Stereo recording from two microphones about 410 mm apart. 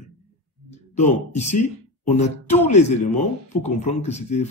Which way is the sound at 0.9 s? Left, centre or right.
Centre.